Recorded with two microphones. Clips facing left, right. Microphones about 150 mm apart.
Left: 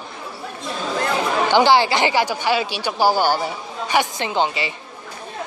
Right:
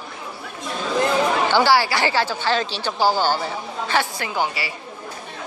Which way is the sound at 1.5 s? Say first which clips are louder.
Left 6 dB; 20° left (ahead or behind).